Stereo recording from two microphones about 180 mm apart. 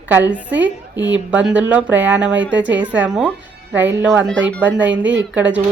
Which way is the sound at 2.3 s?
85° right.